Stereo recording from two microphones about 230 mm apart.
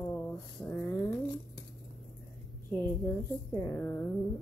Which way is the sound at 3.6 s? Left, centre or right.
Centre.